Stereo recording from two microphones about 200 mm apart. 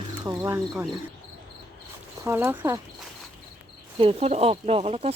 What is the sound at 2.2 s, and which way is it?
Speech, 10° right (ahead or behind).